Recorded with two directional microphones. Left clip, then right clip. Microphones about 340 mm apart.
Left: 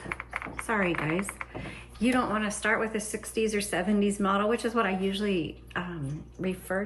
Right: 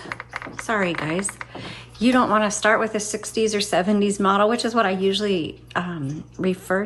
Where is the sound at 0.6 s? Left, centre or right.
Centre.